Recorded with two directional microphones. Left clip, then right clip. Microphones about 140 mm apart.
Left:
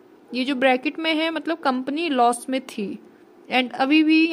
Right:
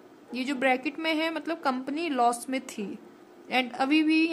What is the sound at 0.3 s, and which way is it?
A woman's voice, 25° left (ahead or behind).